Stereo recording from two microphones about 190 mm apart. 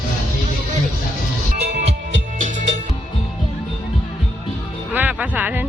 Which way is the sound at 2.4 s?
40° right (ahead or behind).